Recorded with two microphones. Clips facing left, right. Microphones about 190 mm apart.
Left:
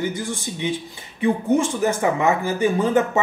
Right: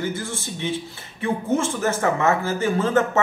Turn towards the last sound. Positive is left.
turn(degrees=15)  # may be behind; listen again after turning